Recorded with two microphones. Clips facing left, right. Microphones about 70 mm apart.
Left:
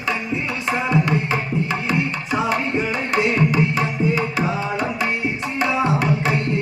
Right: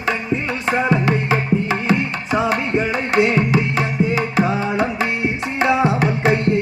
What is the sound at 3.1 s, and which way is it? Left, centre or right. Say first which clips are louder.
Music: right 4 dB; right.